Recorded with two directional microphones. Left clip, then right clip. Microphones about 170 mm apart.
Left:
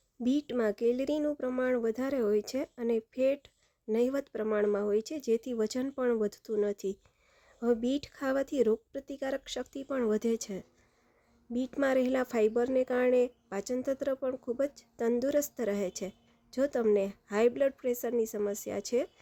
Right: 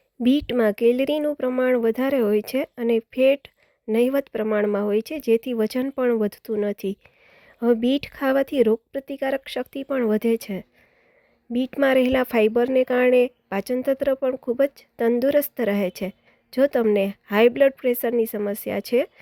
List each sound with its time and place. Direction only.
0.2 s speech: 35° right (ahead or behind)